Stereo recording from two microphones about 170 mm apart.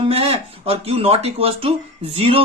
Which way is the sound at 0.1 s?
35° right (ahead or behind).